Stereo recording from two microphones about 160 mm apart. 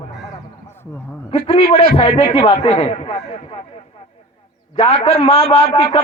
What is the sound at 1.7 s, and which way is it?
A man's voice, 40° left (ahead or behind).